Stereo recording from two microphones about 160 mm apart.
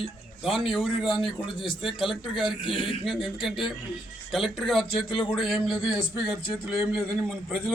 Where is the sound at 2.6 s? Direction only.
35° left (ahead or behind).